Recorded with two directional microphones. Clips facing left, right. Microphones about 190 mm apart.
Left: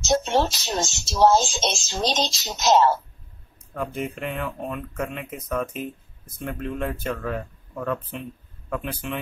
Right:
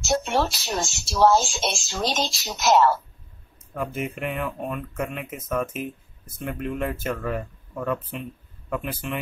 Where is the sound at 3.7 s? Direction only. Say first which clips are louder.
Even; 5° right (ahead or behind).